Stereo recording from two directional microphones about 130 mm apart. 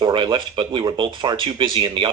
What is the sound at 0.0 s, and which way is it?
Speech, 35° right (ahead or behind).